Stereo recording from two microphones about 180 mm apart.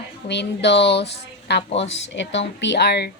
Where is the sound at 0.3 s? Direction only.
70° left (ahead or behind).